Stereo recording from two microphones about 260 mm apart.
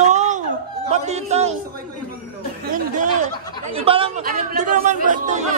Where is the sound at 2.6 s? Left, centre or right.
Right.